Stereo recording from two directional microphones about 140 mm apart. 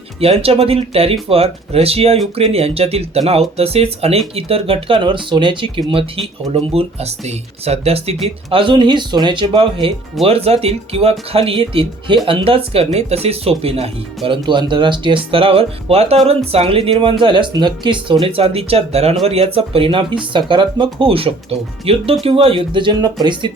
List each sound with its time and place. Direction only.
0.2 s speech: 45° right (ahead or behind)
10.2 s speech: 45° right (ahead or behind)
14.3 s speech: 35° right (ahead or behind)